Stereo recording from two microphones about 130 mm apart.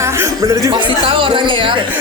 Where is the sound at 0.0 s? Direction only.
20° right (ahead or behind).